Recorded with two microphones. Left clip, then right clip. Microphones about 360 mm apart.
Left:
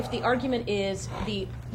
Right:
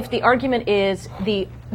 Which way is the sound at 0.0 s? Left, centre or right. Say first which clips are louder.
Right 9 dB; right.